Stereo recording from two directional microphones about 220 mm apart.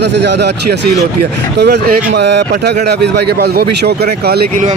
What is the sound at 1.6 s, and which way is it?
A man's voice, 50° right (ahead or behind).